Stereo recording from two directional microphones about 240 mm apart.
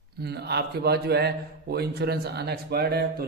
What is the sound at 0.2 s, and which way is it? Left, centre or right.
A man's voice, right.